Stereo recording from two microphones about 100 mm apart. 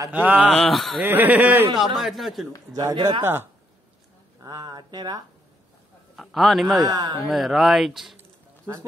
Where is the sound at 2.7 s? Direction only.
40° right (ahead or behind).